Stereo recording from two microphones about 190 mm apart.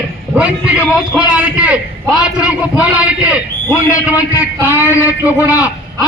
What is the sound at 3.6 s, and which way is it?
Speech, 15° left (ahead or behind).